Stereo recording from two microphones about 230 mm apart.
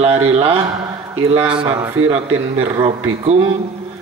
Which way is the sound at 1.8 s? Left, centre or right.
Centre.